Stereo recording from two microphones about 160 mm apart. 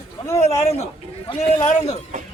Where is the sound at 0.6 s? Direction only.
40° left (ahead or behind).